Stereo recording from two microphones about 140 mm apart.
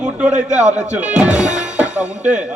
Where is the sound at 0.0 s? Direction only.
10° right (ahead or behind).